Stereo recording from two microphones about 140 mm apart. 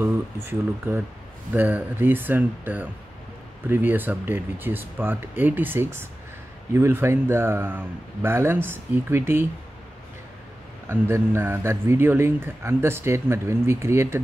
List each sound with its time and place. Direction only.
0.0 s speech: 15° right (ahead or behind)
10.9 s speech: 20° right (ahead or behind)